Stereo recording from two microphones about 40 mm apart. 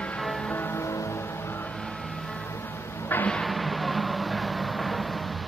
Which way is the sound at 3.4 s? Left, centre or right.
Centre.